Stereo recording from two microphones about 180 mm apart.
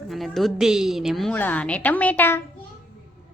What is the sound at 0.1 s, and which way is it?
A woman's voice, centre (ahead or behind).